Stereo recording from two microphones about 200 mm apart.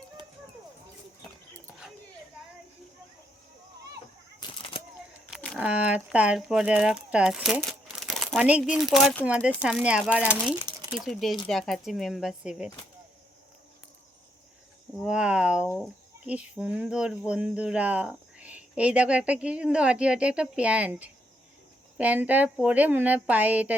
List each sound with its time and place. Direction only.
4.4 s a sound: 25° left (ahead or behind)
5.3 s speech: centre (ahead or behind)
14.9 s a woman's voice: 5° right (ahead or behind)